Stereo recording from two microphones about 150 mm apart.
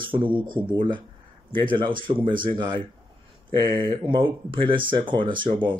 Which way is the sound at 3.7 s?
35° right (ahead or behind).